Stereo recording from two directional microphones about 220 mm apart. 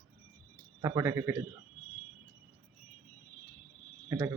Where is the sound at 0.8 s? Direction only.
15° right (ahead or behind).